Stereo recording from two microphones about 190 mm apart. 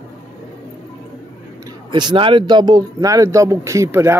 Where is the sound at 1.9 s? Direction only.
25° right (ahead or behind).